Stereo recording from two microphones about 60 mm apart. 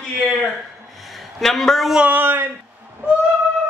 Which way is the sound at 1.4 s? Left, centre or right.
Centre.